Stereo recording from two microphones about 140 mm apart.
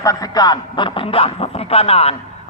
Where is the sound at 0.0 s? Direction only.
25° left (ahead or behind).